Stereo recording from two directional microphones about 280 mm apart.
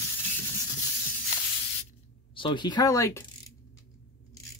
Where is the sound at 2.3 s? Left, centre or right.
Centre.